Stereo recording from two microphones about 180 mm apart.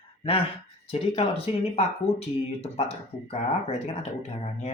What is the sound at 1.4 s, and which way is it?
Speech, 35° left (ahead or behind).